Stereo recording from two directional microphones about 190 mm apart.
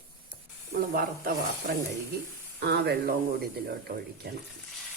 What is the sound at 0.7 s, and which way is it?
Speech, 45° right (ahead or behind).